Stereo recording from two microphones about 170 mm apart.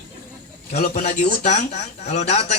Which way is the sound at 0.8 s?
55° left (ahead or behind).